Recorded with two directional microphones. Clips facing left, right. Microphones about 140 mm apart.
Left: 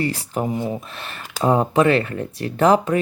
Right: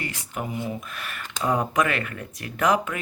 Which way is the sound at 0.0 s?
35° left (ahead or behind).